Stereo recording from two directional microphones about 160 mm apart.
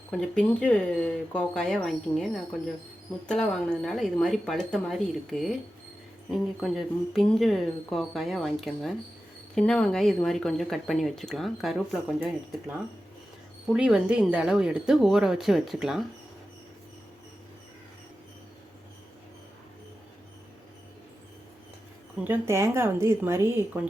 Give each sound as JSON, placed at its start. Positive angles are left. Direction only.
{"t": 0.1, "sound": "speech", "side_deg": 5}
{"t": 13.7, "sound": "speech", "side_deg": -5}
{"t": 22.2, "sound": "speech", "side_deg": -15}